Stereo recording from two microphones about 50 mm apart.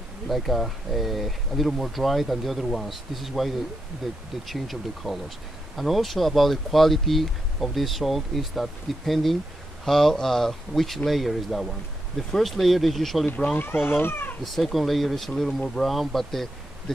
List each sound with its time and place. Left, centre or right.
0.3 s speech: centre
13.5 s speech: left
14.4 s speech: centre